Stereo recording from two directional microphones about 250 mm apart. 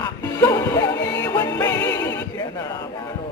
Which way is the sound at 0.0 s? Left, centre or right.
Centre.